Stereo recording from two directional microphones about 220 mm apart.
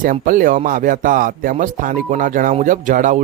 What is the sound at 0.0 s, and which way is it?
Speech, 35° right (ahead or behind).